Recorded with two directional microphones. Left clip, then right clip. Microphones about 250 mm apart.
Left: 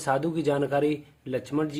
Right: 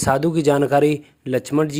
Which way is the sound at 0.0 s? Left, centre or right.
Right.